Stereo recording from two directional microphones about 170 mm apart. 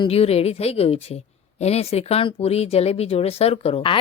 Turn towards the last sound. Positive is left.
turn(degrees=30)  # may be behind; listen again after turning